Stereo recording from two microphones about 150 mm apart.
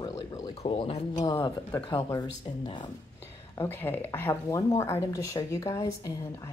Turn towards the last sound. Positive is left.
turn(degrees=25)  # may be behind; listen again after turning